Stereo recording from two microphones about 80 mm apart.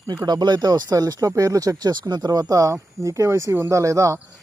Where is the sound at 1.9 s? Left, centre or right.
Right.